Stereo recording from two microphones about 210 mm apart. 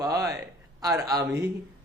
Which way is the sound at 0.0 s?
15° right (ahead or behind).